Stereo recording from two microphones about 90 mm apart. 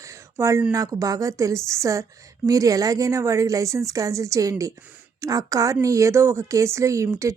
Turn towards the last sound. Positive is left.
turn(degrees=-35)  # may be behind; listen again after turning